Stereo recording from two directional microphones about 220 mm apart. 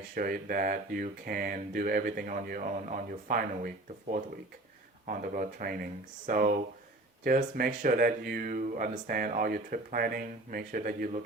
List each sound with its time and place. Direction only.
0.1 s speech: 40° right (ahead or behind)
5.0 s speech: 40° right (ahead or behind)